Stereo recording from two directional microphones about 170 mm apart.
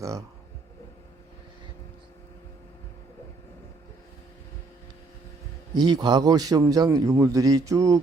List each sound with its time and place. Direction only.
0.0 s speech: 20° right (ahead or behind)
5.7 s a man's voice: 25° right (ahead or behind)